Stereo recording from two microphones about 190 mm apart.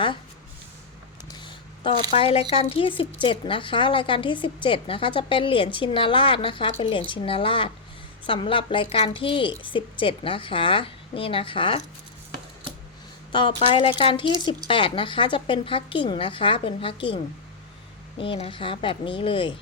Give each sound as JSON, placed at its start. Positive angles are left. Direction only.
{"t": 1.3, "sound": "a sound", "side_deg": 25}
{"t": 1.9, "sound": "a woman's voice", "side_deg": 30}
{"t": 13.3, "sound": "a woman's voice", "side_deg": 25}
{"t": 18.2, "sound": "a woman's voice", "side_deg": 30}